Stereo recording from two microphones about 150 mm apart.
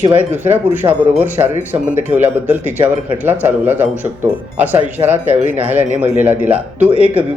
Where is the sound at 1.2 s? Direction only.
15° right (ahead or behind).